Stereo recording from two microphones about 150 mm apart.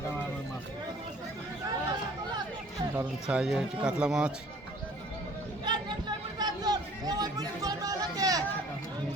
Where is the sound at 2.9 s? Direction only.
10° right (ahead or behind).